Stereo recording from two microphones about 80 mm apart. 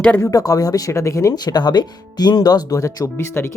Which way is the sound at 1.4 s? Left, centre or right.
Left.